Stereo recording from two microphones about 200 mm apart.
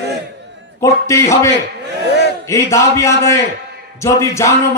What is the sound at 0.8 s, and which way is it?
Speech, 15° left (ahead or behind).